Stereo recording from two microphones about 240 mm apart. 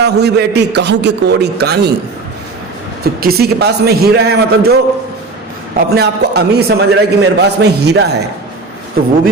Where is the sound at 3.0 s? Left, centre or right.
Right.